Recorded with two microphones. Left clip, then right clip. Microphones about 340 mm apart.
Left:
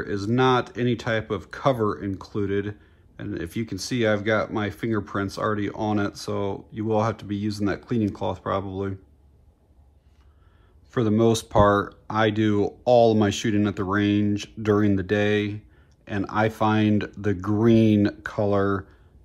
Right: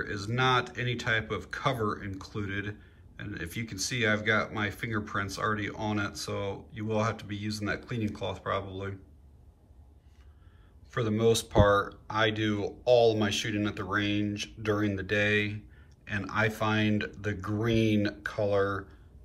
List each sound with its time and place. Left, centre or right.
0.0 s speech: centre
10.9 s speech: centre